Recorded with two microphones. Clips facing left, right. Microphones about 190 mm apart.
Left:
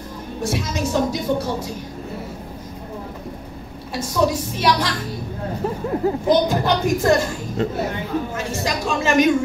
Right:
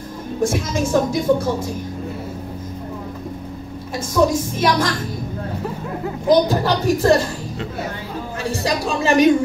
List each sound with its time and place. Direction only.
0.4 s a woman's voice: 50° right (ahead or behind)
3.9 s a woman's voice: 50° right (ahead or behind)
6.0 s speech: 35° left (ahead or behind)
6.5 s speech: 35° right (ahead or behind)
8.5 s speech: 35° right (ahead or behind)